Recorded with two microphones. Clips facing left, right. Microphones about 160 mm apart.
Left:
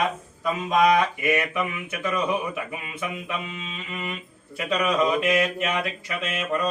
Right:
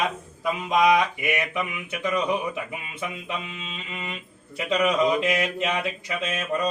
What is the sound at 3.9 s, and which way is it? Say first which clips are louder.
Speech: left 4 dB; 25° right (ahead or behind).